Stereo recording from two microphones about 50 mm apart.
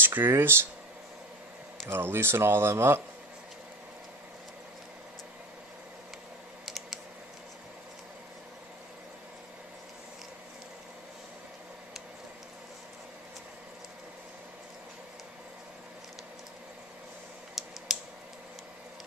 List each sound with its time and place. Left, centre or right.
0.0 s speech: right
1.9 s speech: right
6.6 s computer keyboard: centre
17.6 s computer keyboard: centre